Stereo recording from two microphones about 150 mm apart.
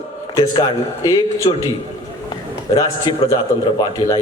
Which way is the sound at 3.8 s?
25° left (ahead or behind).